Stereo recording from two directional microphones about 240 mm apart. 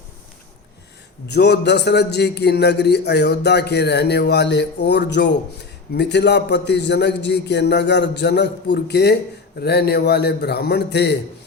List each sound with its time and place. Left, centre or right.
1.3 s a man's voice: left